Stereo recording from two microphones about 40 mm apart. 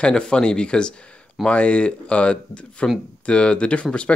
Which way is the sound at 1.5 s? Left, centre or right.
Left.